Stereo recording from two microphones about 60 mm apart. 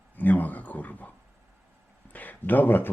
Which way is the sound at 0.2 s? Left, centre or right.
Left.